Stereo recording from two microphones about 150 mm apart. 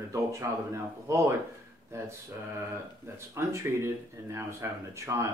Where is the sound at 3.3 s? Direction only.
20° right (ahead or behind).